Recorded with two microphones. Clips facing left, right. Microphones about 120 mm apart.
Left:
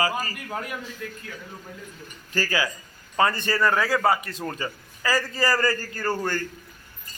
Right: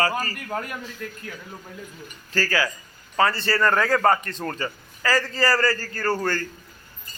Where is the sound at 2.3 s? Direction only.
15° left (ahead or behind).